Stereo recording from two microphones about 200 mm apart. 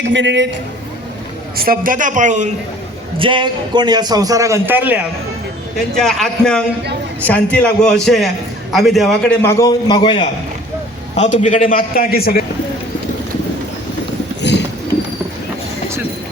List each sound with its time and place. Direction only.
0.0 s a woman's voice: 65° right (ahead or behind)
1.5 s a man's voice: 45° right (ahead or behind)
3.2 s a man's voice: 25° right (ahead or behind); by 4.9 s 10° right (ahead or behind)
6.0 s a man's voice: 5° left (ahead or behind)
9.4 s a man's voice: 15° left (ahead or behind)
11.2 s a man's voice: 40° left (ahead or behind)